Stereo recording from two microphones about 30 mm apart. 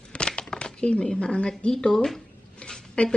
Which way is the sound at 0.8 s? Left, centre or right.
Left.